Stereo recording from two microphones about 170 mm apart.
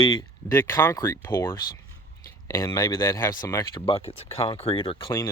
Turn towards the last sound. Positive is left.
turn(degrees=30)  # may be behind; listen again after turning